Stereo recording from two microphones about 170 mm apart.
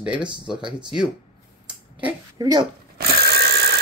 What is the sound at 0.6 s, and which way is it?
Speech, 5° right (ahead or behind).